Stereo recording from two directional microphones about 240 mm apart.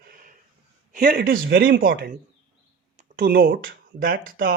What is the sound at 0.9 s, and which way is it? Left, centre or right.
A man's voice, right.